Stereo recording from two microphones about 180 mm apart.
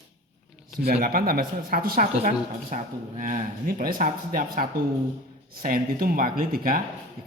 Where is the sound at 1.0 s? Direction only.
55° right (ahead or behind).